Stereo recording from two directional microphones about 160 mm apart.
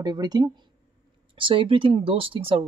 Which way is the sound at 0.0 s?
25° right (ahead or behind).